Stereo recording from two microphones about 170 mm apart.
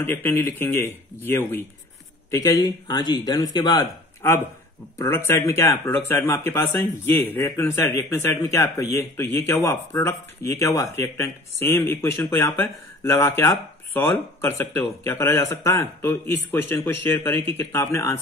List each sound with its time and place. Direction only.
0.0 s speech: 10° left (ahead or behind)